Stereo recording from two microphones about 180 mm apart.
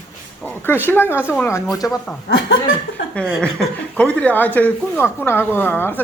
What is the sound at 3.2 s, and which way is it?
Speech, 5° left (ahead or behind).